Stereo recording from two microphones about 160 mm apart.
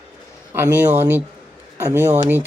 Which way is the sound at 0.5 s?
15° right (ahead or behind).